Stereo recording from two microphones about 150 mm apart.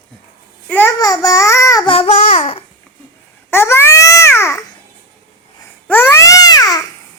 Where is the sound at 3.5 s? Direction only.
15° left (ahead or behind).